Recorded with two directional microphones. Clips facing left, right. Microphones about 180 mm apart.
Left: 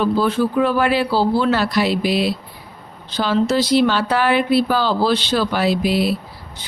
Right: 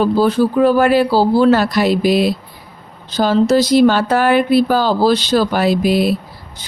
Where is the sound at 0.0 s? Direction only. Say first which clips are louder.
Right 4 dB; 40° right (ahead or behind).